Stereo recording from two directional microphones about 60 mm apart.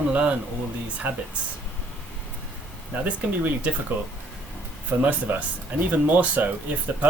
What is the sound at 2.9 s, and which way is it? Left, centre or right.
Speech, right.